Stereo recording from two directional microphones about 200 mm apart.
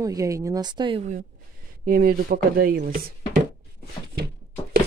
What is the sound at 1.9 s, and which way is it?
Speech, 45° right (ahead or behind).